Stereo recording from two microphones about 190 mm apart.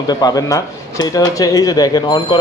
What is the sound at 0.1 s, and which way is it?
A man's voice, 20° left (ahead or behind).